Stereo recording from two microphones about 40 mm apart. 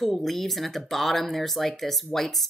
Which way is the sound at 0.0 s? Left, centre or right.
Centre.